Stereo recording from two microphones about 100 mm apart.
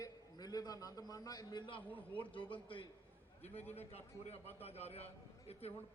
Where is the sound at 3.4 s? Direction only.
90° left.